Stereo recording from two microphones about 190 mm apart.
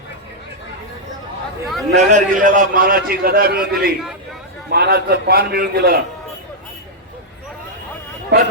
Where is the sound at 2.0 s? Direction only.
40° right (ahead or behind); by 6.0 s 55° right (ahead or behind).